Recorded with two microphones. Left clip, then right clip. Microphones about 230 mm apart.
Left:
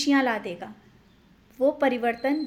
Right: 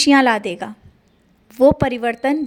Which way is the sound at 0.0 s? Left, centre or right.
Right.